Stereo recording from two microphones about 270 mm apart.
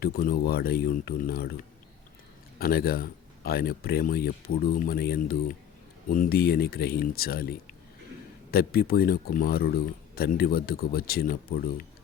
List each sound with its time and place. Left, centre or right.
0.0 s speech: left
2.6 s speech: left